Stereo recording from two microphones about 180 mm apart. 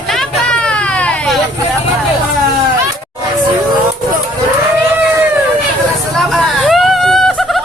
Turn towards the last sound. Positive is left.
turn(degrees=0)  # may be behind; listen again after turning